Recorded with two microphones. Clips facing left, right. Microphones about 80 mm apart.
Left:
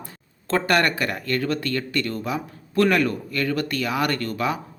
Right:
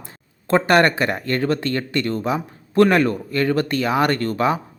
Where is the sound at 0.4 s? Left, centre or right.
Right.